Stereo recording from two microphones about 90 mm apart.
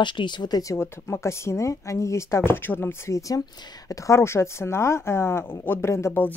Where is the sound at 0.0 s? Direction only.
60° left (ahead or behind); by 0.7 s 45° left (ahead or behind).